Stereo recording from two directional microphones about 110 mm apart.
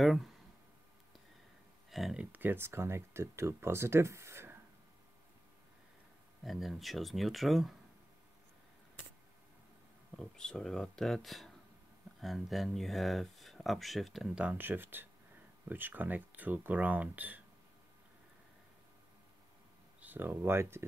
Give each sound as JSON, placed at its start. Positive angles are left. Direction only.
{"t": 0.0, "sound": "speech", "side_deg": 0}
{"t": 1.9, "sound": "speech", "side_deg": 0}
{"t": 2.3, "sound": "speech", "side_deg": -20}
{"t": 6.4, "sound": "speech", "side_deg": 0}
{"t": 10.1, "sound": "speech", "side_deg": 5}
{"t": 20.0, "sound": "speech", "side_deg": -15}